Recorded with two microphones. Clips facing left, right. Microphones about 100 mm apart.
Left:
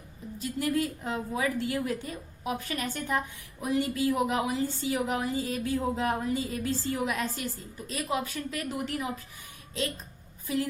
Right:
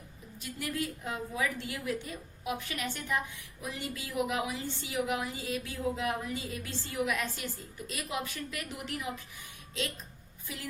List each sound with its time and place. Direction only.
0.3 s a woman's voice: 35° left (ahead or behind)